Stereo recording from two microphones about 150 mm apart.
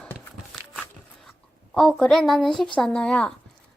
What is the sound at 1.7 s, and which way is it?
A child's voice, 5° left (ahead or behind).